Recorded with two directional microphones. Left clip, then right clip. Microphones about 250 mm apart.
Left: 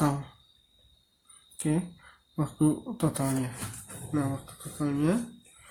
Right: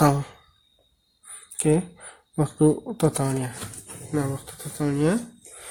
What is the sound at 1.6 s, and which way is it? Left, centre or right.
Speech, right.